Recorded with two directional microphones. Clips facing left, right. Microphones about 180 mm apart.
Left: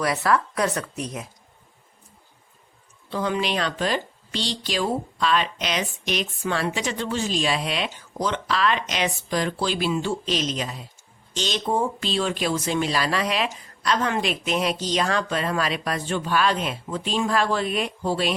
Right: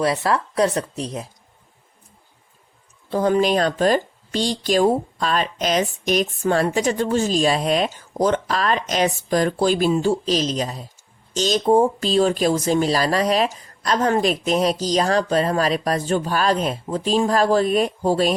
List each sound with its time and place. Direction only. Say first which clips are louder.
0.0 s speech: right 2 dB; 30° right (ahead or behind)
3.1 s speech: right 7 dB; 45° right (ahead or behind)